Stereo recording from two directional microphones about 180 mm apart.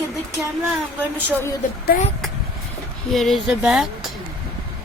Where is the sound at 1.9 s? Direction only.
55° left (ahead or behind).